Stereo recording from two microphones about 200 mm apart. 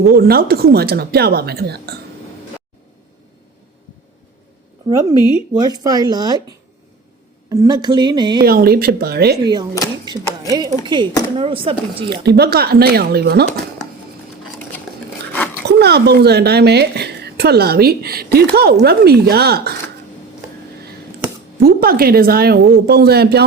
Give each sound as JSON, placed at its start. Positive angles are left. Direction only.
{"t": 0.1, "sound": "speech", "side_deg": -50}
{"t": 5.5, "sound": "speech", "side_deg": -20}
{"t": 7.5, "sound": "speech", "side_deg": -20}
{"t": 8.4, "sound": "speech", "side_deg": -50}
{"t": 9.8, "sound": "speech", "side_deg": 15}
{"t": 10.5, "sound": "speech", "side_deg": -20}
{"t": 12.1, "sound": "speech", "side_deg": -55}
{"t": 15.6, "sound": "speech", "side_deg": -55}
{"t": 21.6, "sound": "speech", "side_deg": -50}